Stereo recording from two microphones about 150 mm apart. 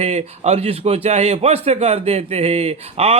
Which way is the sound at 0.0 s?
45° right (ahead or behind).